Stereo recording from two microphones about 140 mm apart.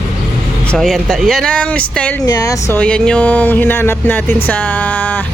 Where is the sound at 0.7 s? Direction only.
Centre (ahead or behind).